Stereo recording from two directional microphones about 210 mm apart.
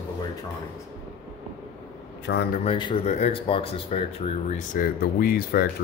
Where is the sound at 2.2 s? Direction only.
55° left (ahead or behind).